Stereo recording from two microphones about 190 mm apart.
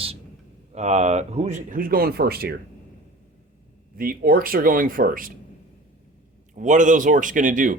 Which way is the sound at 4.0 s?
50° right (ahead or behind).